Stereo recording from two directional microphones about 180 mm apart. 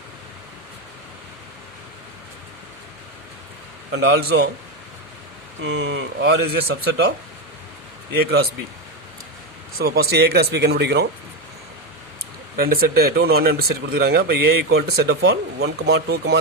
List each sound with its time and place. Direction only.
3.9 s speech: 75° right (ahead or behind)
5.6 s speech: 80° right; by 7.1 s 65° right (ahead or behind)
9.7 s speech: 60° right (ahead or behind)
12.5 s speech: 55° right (ahead or behind)